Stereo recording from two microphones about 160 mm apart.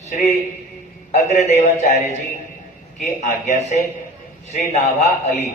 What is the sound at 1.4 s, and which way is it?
Speech, 50° left (ahead or behind).